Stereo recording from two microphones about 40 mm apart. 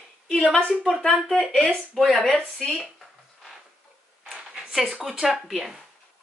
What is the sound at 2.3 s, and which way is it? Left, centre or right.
Speech, left.